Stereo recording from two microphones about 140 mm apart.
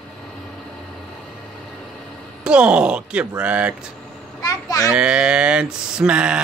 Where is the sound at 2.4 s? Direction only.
5° right (ahead or behind).